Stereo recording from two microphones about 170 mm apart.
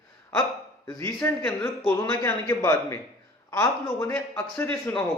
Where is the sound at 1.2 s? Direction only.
10° left (ahead or behind).